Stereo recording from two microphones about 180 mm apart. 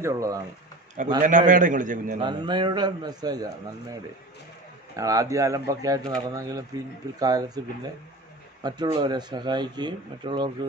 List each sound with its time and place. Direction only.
0.0 s speech: 20° right (ahead or behind)
1.2 s a man's voice: 45° right (ahead or behind)
2.1 s speech: 25° right (ahead or behind)
4.9 s speech: 20° right (ahead or behind)